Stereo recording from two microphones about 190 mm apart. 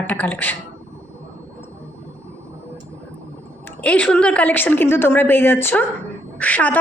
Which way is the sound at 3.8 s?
5° left (ahead or behind).